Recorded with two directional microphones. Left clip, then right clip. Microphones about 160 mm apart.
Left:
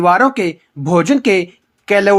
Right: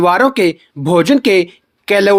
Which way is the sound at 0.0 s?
50° right (ahead or behind).